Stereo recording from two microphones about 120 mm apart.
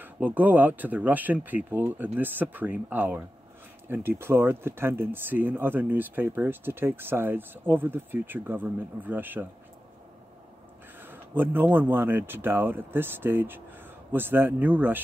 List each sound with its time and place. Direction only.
0.0 s speech: 15° right (ahead or behind)
11.0 s speech: 15° right (ahead or behind)